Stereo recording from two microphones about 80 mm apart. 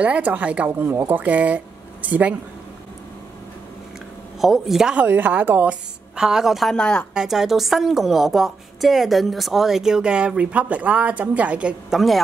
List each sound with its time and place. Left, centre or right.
0.0 s a woman's voice: centre
4.4 s a woman's voice: centre
4.9 s a woman's voice: right
6.1 s a woman's voice: centre
6.7 s speech: centre
7.2 s a woman's voice: centre